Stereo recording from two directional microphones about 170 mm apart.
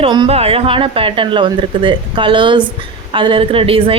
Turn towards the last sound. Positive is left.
turn(degrees=-30)  # may be behind; listen again after turning